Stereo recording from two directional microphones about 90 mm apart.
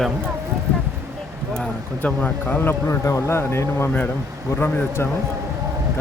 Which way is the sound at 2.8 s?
35° left (ahead or behind).